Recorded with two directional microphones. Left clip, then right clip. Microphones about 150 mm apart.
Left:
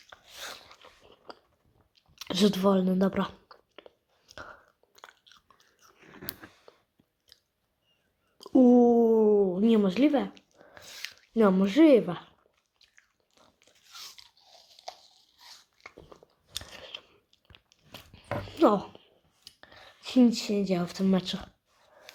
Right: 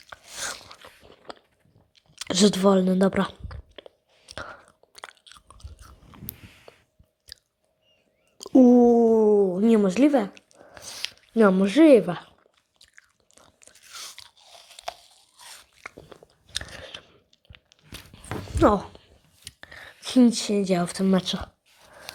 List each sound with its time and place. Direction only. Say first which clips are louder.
0.1 s biting: right 8 dB; 35° right (ahead or behind)
2.0 s speech: right 5 dB; 30° right (ahead or behind)
4.3 s chewing: right 7 dB; 30° right (ahead or behind)
6.7 s chewing: right 6 dB; 15° right (ahead or behind)
7.3 s chewing: right 13 dB; 30° right (ahead or behind)
8.4 s a sound: right 4 dB; 20° right (ahead or behind)
16.0 s chewing: right 5 dB; 20° right (ahead or behind)
18.1 s a sound: left 1 dB; 20° right (ahead or behind)
19.5 s a sound: right 8 dB; 40° right (ahead or behind)